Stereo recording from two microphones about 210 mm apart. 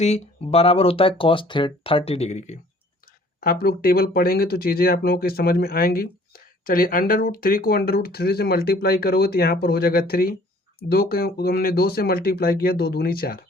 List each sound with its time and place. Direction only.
0.0 s speech: 30° left (ahead or behind)
3.4 s speech: 45° left (ahead or behind)